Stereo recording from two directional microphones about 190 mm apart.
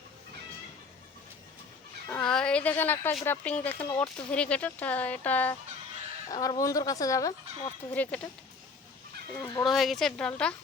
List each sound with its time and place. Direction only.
2.0 s a woman's voice: 5° left (ahead or behind)
7.9 s a woman's voice: 5° left (ahead or behind)
9.4 s speech: 20° left (ahead or behind)
9.6 s a woman's voice: centre (ahead or behind)